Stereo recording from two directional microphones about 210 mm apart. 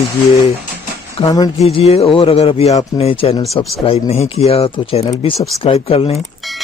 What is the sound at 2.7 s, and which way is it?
Speech, 15° left (ahead or behind).